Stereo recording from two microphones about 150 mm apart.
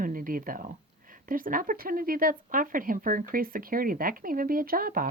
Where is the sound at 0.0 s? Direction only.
65° right (ahead or behind).